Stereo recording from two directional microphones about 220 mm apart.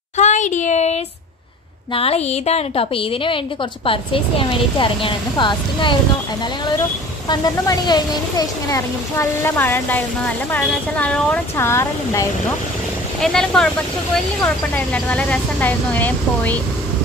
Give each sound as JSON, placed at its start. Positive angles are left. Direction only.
{"t": 0.2, "sound": "a sound", "side_deg": 35}
{"t": 2.0, "sound": "a woman's voice", "side_deg": 30}
{"t": 7.2, "sound": "a woman's voice", "side_deg": 20}
{"t": 13.2, "sound": "a woman's voice", "side_deg": 5}